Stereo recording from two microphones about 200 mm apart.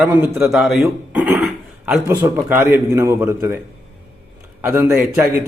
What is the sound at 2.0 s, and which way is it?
A man's voice, 10° right (ahead or behind).